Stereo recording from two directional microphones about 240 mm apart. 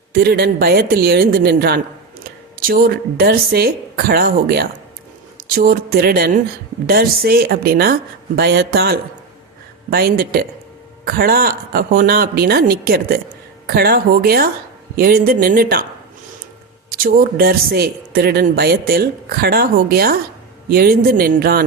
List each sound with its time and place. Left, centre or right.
0.1 s speech: right
16.9 s speech: right